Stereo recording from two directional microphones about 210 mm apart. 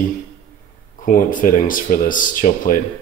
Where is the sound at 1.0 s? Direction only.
40° left (ahead or behind).